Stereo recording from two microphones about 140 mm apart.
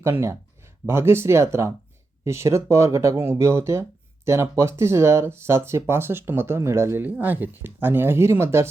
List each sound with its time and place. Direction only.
0.0 s speech: 20° right (ahead or behind)